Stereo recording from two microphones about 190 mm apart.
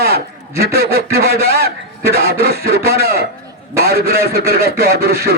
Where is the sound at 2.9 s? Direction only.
55° right (ahead or behind).